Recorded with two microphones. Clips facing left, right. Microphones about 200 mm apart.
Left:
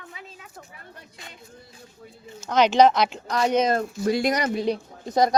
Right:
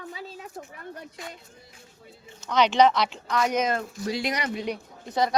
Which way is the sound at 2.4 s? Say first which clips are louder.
Left 3 dB; 45° left (ahead or behind).